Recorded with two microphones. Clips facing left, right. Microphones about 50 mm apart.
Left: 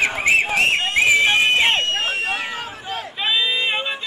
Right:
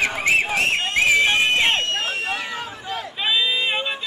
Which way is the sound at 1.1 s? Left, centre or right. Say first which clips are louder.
Left 1 dB; centre.